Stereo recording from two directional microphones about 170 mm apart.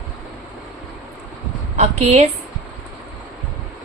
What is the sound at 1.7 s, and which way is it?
Speech, 40° right (ahead or behind).